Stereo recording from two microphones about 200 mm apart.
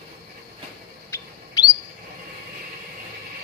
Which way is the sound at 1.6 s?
15° left (ahead or behind).